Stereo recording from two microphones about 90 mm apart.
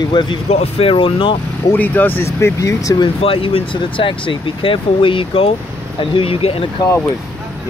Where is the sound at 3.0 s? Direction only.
85° left.